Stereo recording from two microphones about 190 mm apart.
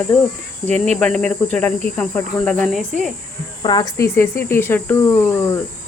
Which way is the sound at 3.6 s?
20° left (ahead or behind).